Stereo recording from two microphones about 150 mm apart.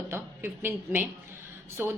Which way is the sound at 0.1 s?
15° right (ahead or behind).